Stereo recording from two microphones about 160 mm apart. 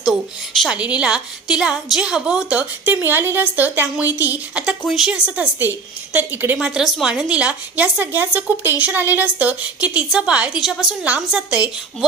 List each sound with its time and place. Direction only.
0.0 s a woman's voice: 5° right (ahead or behind)